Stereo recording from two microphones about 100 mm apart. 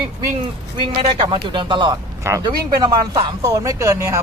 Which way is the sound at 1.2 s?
50° right (ahead or behind).